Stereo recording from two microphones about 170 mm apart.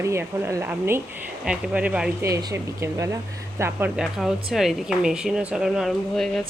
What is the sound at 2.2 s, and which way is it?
A woman's voice, 20° right (ahead or behind).